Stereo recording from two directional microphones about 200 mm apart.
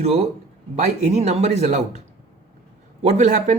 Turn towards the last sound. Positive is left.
turn(degrees=-35)  # may be behind; listen again after turning